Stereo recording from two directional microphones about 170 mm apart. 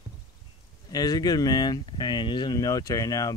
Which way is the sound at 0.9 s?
20° left (ahead or behind).